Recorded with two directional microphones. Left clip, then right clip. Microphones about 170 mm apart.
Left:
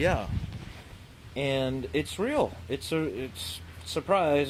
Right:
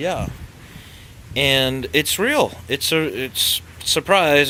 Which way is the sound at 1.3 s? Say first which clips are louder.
Right 12 dB; 15° right (ahead or behind).